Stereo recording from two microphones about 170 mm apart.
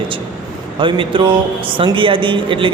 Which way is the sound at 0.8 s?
30° right (ahead or behind).